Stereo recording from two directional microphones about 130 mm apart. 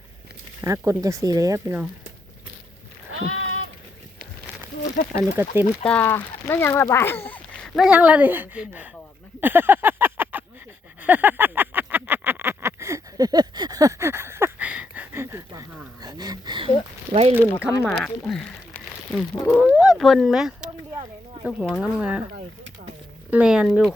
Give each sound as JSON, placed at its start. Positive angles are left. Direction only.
{"t": 0.6, "sound": "speech", "side_deg": -25}
{"t": 5.1, "sound": "speech", "side_deg": -20}
{"t": 5.8, "sound": "speech", "side_deg": 10}
{"t": 7.9, "sound": "speech", "side_deg": -10}
{"t": 9.4, "sound": "a sound", "side_deg": -15}
{"t": 16.6, "sound": "speech", "side_deg": -50}
{"t": 17.8, "sound": "speech", "side_deg": 0}
{"t": 23.3, "sound": "speech", "side_deg": -5}